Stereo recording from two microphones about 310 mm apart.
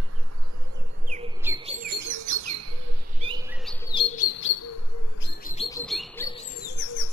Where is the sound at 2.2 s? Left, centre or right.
Right.